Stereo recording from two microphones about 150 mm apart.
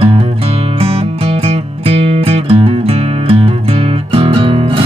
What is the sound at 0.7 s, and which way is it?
Music, 40° right (ahead or behind).